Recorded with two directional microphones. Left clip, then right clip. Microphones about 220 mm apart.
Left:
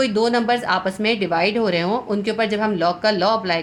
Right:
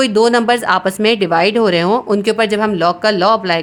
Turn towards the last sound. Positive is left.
turn(degrees=-40)  # may be behind; listen again after turning